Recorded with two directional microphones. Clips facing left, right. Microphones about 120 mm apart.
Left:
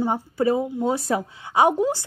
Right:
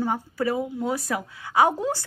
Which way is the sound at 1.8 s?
15° left (ahead or behind).